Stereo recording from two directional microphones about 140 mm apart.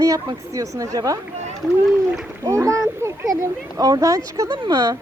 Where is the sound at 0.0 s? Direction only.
25° right (ahead or behind).